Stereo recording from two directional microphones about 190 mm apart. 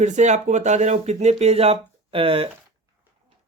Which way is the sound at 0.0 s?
40° right (ahead or behind).